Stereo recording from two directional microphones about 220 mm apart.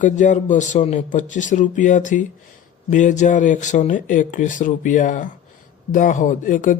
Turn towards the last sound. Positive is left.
turn(degrees=35)  # may be behind; listen again after turning